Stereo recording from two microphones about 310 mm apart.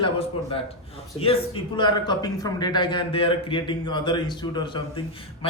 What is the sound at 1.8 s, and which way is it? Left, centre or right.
A man's voice, centre.